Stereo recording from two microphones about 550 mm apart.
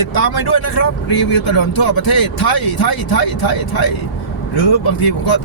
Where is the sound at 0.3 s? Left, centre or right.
Left.